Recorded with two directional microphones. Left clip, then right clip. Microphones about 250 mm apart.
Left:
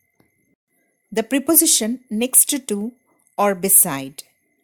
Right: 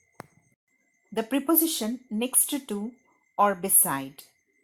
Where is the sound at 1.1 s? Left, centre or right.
Left.